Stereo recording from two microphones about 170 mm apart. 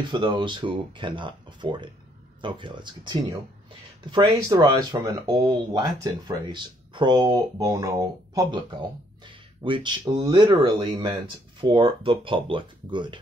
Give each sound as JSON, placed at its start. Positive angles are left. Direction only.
{"t": 0.1, "sound": "speech", "side_deg": -25}